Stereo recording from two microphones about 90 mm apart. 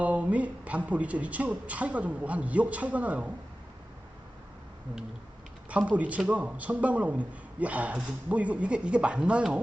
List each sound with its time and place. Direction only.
0.0 s a man's voice: 15° right (ahead or behind)
5.6 s a man's voice: 15° right (ahead or behind)